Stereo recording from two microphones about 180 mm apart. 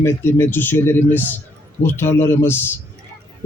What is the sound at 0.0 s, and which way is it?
A man's voice, 15° left (ahead or behind).